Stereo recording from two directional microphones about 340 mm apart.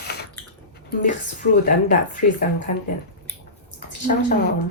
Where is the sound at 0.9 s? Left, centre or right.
Left.